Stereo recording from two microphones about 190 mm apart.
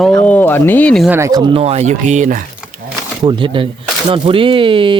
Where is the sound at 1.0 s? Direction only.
15° right (ahead or behind); by 2.4 s 40° right (ahead or behind).